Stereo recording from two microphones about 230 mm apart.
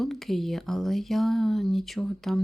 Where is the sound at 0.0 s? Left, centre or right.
Centre.